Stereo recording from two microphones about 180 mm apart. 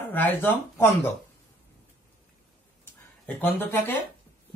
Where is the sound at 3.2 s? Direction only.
10° left (ahead or behind).